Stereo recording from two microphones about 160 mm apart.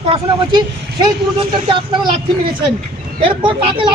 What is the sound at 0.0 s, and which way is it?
Speech, 35° right (ahead or behind).